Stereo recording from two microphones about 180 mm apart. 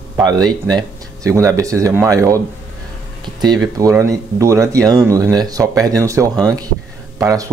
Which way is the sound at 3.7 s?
15° right (ahead or behind).